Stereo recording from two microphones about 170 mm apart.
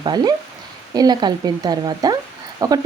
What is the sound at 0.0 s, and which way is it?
A woman's voice, 25° right (ahead or behind).